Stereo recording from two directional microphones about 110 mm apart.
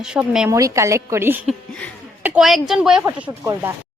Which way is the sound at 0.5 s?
25° right (ahead or behind).